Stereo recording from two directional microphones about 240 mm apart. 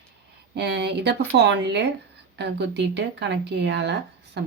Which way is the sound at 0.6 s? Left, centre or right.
Right.